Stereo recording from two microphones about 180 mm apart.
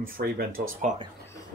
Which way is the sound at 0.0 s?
60° right (ahead or behind).